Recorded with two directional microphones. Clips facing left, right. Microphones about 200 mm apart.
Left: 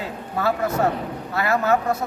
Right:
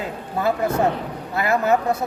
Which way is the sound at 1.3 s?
15° right (ahead or behind).